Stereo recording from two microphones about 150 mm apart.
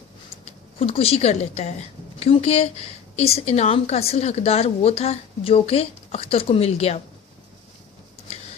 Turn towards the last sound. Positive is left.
turn(degrees=45)  # may be behind; listen again after turning